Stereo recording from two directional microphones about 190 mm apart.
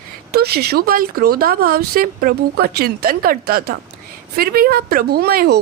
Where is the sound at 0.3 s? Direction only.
55° right (ahead or behind).